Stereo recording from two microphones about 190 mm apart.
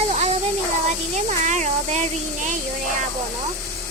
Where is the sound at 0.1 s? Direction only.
35° right (ahead or behind).